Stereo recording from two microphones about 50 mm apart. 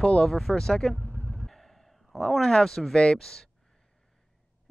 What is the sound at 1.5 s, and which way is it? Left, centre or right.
Speech, centre.